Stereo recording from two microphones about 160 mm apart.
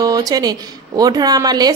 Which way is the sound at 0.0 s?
25° right (ahead or behind).